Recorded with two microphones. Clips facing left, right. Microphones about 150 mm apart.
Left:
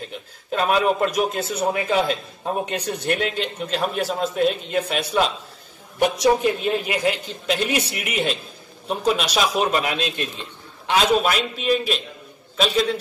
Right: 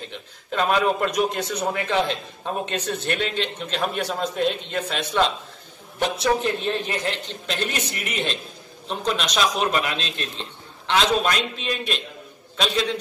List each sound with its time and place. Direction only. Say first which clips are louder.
0.5 s a man's voice: left 1 dB; 5° left (ahead or behind)